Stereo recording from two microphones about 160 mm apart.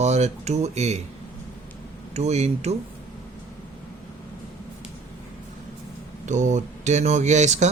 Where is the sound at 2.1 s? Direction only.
45° right (ahead or behind).